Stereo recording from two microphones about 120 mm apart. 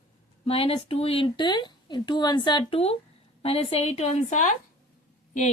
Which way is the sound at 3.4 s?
55° left (ahead or behind).